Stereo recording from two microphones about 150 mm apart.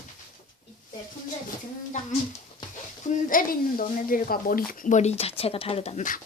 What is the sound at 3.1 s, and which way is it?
Speech, 65° left (ahead or behind).